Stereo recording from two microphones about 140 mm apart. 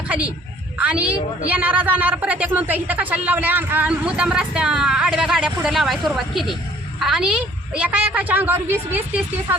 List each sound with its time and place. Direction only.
0.8 s a woman's voice: 10° right (ahead or behind)